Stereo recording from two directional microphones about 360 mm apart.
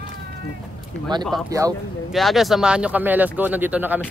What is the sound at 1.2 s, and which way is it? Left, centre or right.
Speech, centre.